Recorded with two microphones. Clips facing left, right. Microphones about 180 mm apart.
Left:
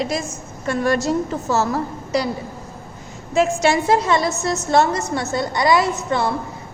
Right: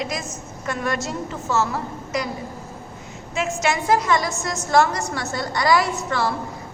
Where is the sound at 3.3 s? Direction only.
35° left (ahead or behind).